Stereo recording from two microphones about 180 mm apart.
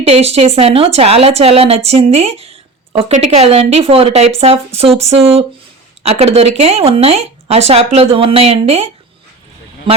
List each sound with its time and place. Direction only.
0.0 s speech: 35° right (ahead or behind)